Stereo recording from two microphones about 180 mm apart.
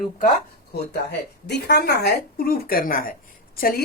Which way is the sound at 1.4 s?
70° left (ahead or behind).